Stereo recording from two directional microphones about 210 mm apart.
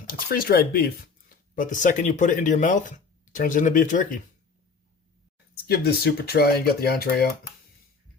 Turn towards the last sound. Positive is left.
turn(degrees=50)  # may be behind; listen again after turning